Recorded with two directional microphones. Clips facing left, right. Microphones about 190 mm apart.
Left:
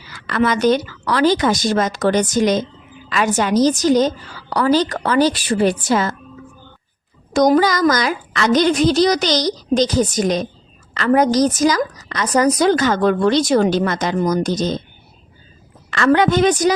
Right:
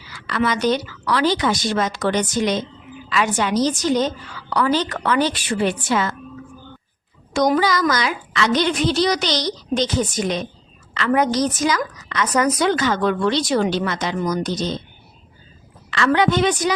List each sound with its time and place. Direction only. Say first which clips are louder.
0.1 s a woman's voice: left 3 dB; 50° left (ahead or behind)
7.3 s a woman's voice: left 4 dB; 40° left (ahead or behind)
15.9 s a woman's voice: left 3 dB; 45° left (ahead or behind)